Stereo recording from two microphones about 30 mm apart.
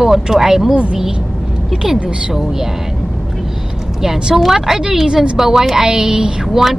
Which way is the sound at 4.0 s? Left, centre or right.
Centre.